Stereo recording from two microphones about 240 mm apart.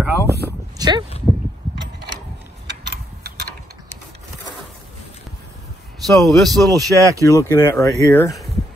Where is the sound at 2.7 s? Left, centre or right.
Right.